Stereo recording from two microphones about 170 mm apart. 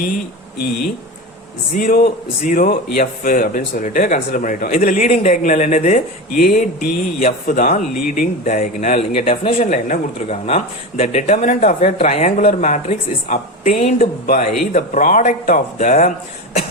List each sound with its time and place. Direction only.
1.7 s speech: 55° left (ahead or behind)